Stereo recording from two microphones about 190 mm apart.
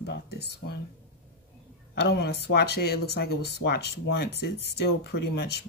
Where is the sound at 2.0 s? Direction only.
60° left (ahead or behind).